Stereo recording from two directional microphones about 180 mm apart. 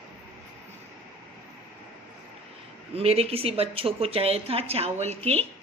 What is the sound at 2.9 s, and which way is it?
A woman's voice, 35° right (ahead or behind).